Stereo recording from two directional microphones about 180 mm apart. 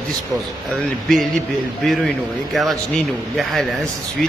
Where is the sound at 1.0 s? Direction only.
Centre (ahead or behind).